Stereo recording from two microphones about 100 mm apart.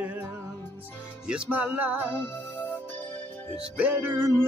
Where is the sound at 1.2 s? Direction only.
10° right (ahead or behind).